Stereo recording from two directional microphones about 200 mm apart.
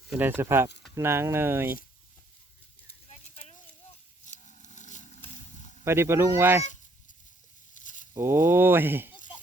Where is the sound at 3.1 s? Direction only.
35° left (ahead or behind).